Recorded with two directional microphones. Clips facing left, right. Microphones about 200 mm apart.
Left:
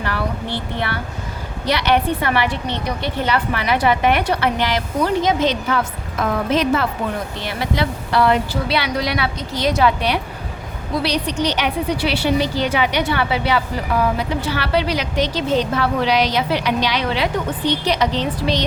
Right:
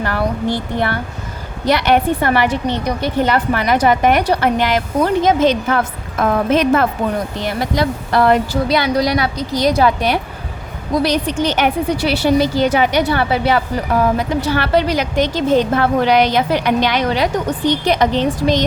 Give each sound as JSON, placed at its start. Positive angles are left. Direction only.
{"t": 0.0, "sound": "a woman's voice", "side_deg": -45}